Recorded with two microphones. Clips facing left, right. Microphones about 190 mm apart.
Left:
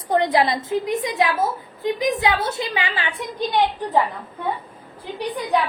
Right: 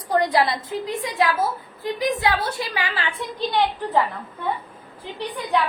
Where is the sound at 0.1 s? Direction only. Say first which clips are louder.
Left 1 dB; 20° left (ahead or behind).